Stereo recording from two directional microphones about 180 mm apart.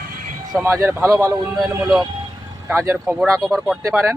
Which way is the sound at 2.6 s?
15° right (ahead or behind).